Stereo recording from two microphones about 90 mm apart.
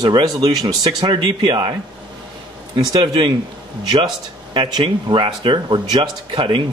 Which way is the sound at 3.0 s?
70° right (ahead or behind).